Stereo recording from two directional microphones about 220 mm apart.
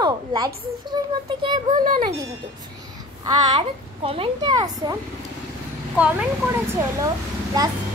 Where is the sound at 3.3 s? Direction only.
20° right (ahead or behind).